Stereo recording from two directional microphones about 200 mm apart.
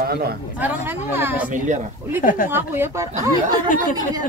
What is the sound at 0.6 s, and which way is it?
Speech, 10° right (ahead or behind).